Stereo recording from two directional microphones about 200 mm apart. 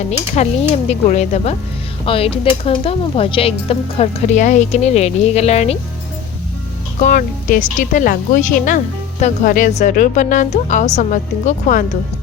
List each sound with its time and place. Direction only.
0.4 s a woman's voice: 30° left (ahead or behind)
2.0 s dishes: 30° left (ahead or behind)
7.0 s a woman's voice: 40° left (ahead or behind)